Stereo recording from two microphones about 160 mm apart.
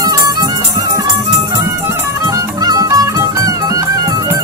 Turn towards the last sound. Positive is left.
turn(degrees=-20)  # may be behind; listen again after turning